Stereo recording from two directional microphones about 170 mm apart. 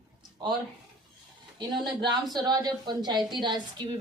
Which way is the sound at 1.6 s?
25° right (ahead or behind).